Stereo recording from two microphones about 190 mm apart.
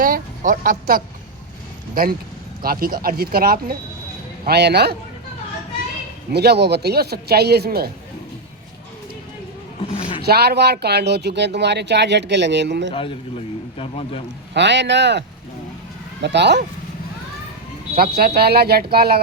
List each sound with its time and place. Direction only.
0.0 s speech: 45° right (ahead or behind)
2.6 s speech: 50° right (ahead or behind)
6.3 s speech: 60° right (ahead or behind)
9.8 s a sound: 30° left (ahead or behind)
10.2 s speech: 60° right (ahead or behind)
12.9 s a man's voice: 30° left (ahead or behind)
14.5 s a man's voice: 65° right (ahead or behind)
16.2 s speech: 65° right (ahead or behind)
17.9 s speech: 55° right (ahead or behind)